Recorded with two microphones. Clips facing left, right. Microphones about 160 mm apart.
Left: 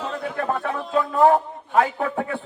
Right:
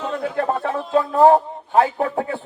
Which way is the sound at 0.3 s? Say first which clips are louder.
Right 3 dB; 30° right (ahead or behind).